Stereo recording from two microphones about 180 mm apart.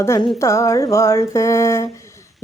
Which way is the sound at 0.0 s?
15° left (ahead or behind).